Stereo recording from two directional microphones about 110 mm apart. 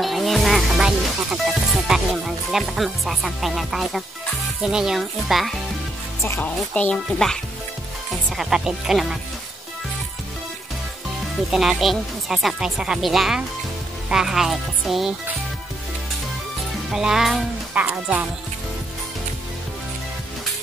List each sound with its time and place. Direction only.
0.0 s music: centre (ahead or behind)
4.6 s speech: 5° right (ahead or behind)
6.2 s speech: 20° left (ahead or behind)
6.7 s speech: 10° left (ahead or behind)
8.4 s speech: 5° right (ahead or behind)
11.5 s speech: centre (ahead or behind)
16.9 s speech: 5° right (ahead or behind)
17.7 s speech: 10° right (ahead or behind)